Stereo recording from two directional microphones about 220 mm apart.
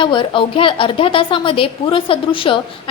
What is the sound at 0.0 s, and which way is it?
A woman's voice, 20° left (ahead or behind).